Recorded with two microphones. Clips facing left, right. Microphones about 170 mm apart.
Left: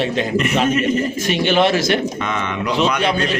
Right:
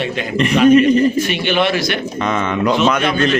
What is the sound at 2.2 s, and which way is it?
Speech, 45° right (ahead or behind).